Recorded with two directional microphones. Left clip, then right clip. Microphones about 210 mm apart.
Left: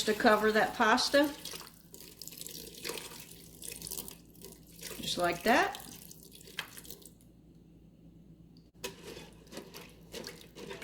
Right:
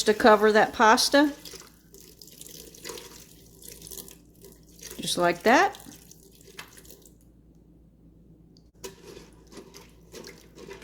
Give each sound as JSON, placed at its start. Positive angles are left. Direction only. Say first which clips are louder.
{"t": 0.0, "sound": "speech", "louder": "right 8 dB", "side_deg": -55}
{"t": 5.0, "sound": "speech", "louder": "right 7 dB", "side_deg": -55}